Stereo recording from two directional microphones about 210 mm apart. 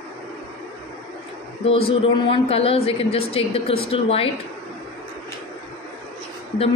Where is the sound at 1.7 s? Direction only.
30° left (ahead or behind).